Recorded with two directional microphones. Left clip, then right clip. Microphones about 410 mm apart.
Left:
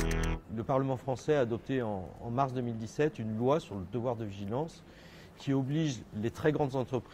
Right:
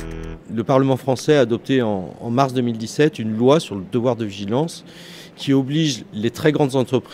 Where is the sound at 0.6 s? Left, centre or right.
Centre.